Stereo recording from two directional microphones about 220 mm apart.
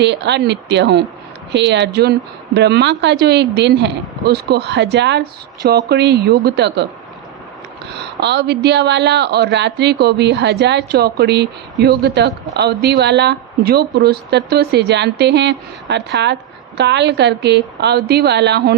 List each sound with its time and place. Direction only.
0.0 s speech: 50° right (ahead or behind)
8.2 s speech: 50° right (ahead or behind)